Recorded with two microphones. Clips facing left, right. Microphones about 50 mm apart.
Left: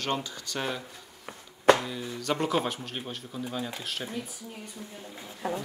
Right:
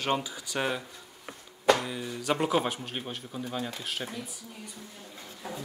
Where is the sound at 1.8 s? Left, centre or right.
Centre.